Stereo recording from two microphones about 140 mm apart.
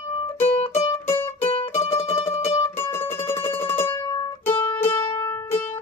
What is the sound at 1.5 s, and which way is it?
Music, 45° left (ahead or behind).